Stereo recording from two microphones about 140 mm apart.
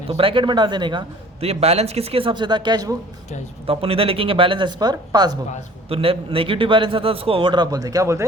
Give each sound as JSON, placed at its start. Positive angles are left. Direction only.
{"t": 0.1, "sound": "a man's voice", "side_deg": -40}
{"t": 1.4, "sound": "a man's voice", "side_deg": -50}
{"t": 3.7, "sound": "a man's voice", "side_deg": -45}
{"t": 5.9, "sound": "a man's voice", "side_deg": -45}